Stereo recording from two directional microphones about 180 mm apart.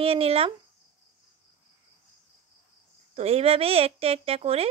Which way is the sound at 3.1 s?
35° right (ahead or behind).